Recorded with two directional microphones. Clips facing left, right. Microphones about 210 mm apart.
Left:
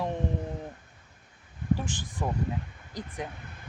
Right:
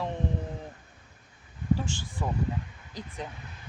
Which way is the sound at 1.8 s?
15° left (ahead or behind).